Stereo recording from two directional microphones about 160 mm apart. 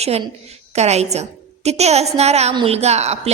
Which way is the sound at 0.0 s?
40° right (ahead or behind).